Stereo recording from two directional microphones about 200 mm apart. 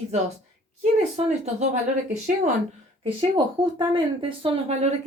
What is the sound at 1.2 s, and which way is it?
Speech, 25° right (ahead or behind).